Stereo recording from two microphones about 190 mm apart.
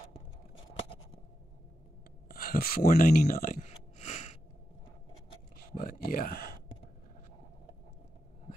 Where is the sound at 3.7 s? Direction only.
35° left (ahead or behind).